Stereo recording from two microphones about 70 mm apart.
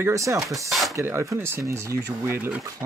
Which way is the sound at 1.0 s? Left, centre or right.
Right.